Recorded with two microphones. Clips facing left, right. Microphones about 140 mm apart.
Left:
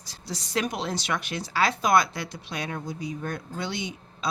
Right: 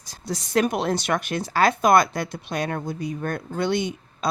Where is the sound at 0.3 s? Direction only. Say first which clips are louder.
Right 7 dB; 50° right (ahead or behind).